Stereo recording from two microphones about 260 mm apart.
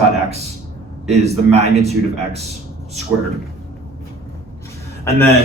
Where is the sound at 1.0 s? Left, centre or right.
Right.